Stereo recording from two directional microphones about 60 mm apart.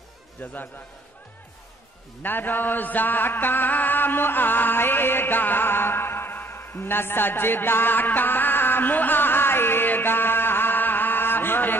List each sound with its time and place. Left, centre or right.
0.4 s a man's voice: left
2.2 s chant: left